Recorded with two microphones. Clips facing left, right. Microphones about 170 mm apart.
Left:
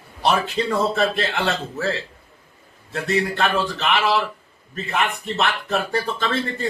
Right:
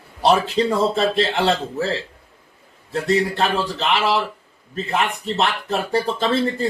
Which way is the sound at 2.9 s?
35° right (ahead or behind).